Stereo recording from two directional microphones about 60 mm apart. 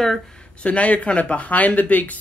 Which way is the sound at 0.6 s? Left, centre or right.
Left.